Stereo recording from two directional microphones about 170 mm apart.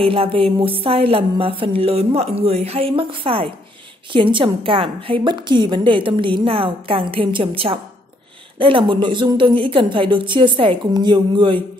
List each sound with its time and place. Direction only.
0.0 s a woman's voice: 35° right (ahead or behind)